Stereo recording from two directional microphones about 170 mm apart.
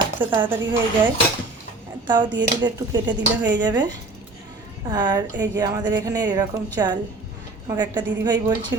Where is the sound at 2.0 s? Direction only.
25° right (ahead or behind).